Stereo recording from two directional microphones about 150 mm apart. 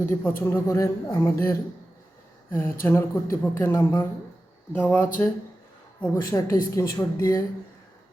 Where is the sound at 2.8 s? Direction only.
15° left (ahead or behind).